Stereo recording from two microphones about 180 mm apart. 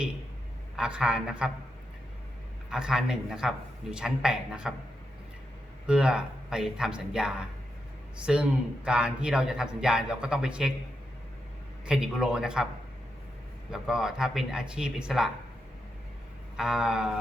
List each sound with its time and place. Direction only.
0.8 s a man's voice: 5° right (ahead or behind)
2.6 s a man's voice: 5° right (ahead or behind)
5.8 s a man's voice: 5° right (ahead or behind)
11.9 s a man's voice: 5° right (ahead or behind)
13.7 s a man's voice: 5° right (ahead or behind)
16.6 s a man's voice: 5° right (ahead or behind)